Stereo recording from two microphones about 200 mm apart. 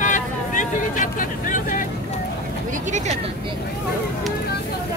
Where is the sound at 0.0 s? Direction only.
40° left (ahead or behind).